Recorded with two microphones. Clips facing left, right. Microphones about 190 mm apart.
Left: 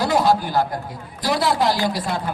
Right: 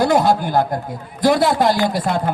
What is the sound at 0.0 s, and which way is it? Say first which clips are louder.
A man's voice: right 3 dB; 50° right (ahead or behind).